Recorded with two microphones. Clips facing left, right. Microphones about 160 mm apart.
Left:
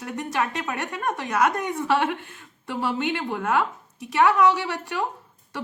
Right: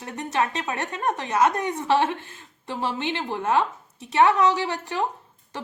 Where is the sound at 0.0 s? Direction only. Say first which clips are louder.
Right 1 dB; 25° right (ahead or behind).